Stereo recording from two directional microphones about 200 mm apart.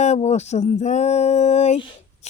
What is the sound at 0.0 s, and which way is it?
Speech, 35° left (ahead or behind).